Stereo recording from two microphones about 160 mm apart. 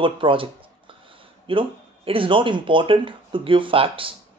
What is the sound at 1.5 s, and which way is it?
Speech, 35° right (ahead or behind).